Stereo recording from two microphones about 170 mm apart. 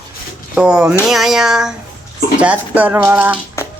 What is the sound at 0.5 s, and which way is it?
A woman's voice, 5° right (ahead or behind).